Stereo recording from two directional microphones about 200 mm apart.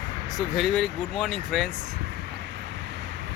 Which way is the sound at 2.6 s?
60° right (ahead or behind).